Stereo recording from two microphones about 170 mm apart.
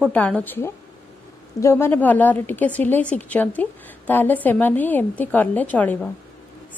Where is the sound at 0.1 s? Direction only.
10° left (ahead or behind).